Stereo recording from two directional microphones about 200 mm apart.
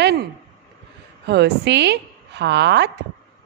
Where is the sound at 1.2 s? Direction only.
55° right (ahead or behind).